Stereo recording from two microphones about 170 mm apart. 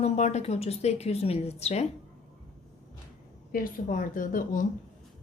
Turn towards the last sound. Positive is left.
turn(degrees=50)  # may be behind; listen again after turning